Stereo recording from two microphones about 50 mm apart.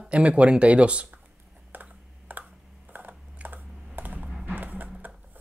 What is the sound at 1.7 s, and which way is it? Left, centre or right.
Computer keyboard, right.